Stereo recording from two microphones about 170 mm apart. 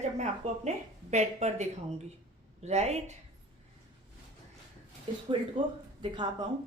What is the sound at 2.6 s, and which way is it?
Speech, 40° right (ahead or behind).